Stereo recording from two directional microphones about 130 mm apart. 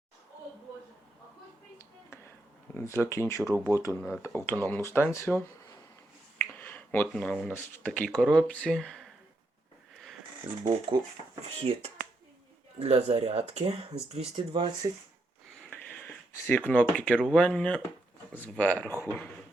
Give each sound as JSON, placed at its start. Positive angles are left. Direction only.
{"t": 2.7, "sound": "speech", "side_deg": 20}
{"t": 3.5, "sound": "speech", "side_deg": -20}
{"t": 3.8, "sound": "speech", "side_deg": 25}
{"t": 10.5, "sound": "speech", "side_deg": -10}
{"t": 10.9, "sound": "speech", "side_deg": -40}
{"t": 11.4, "sound": "speech", "side_deg": -50}
{"t": 15.7, "sound": "a sound", "side_deg": 10}
{"t": 17.2, "sound": "speech", "side_deg": 5}